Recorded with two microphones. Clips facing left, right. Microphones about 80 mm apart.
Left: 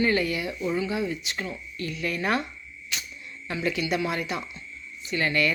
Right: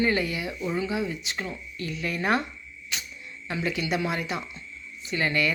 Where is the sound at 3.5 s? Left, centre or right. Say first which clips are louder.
Left 1 dB; right.